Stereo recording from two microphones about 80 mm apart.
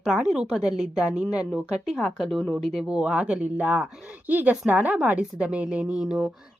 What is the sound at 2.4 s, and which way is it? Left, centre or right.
Speech, left.